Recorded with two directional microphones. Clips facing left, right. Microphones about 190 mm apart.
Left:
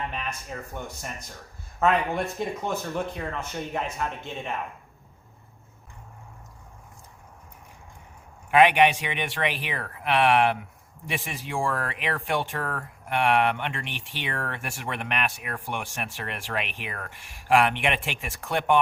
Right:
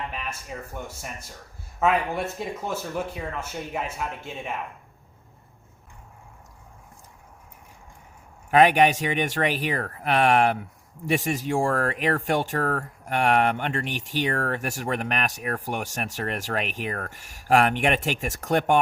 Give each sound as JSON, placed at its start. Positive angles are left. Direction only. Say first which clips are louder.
{"t": 0.1, "sound": "speech", "louder": "left 1 dB", "side_deg": -5}
{"t": 8.4, "sound": "speech", "louder": "right 1 dB", "side_deg": -40}